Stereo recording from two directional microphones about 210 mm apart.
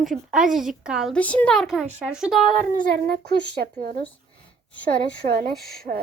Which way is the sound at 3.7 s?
45° right (ahead or behind).